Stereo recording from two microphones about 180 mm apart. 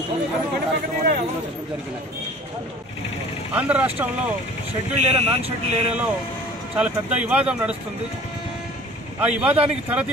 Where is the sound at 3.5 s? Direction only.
10° right (ahead or behind).